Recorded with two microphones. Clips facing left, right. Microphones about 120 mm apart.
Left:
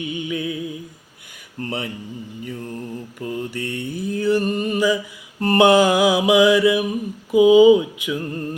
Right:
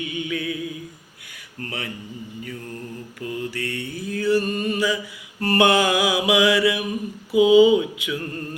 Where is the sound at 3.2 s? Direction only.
20° left (ahead or behind).